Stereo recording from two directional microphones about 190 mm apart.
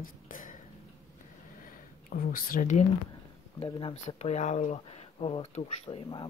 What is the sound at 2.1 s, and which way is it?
Speech, 50° left (ahead or behind).